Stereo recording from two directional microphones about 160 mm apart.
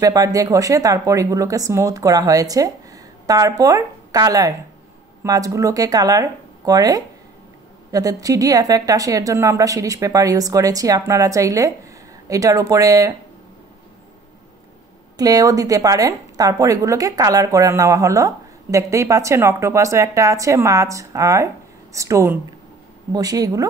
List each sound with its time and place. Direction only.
0.0 s a woman's voice: 20° right (ahead or behind)
15.1 s a woman's voice: 25° right (ahead or behind)